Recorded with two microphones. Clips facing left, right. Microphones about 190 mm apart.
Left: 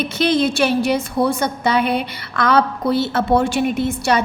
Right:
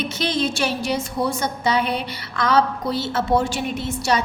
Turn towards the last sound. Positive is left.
turn(degrees=55)  # may be behind; listen again after turning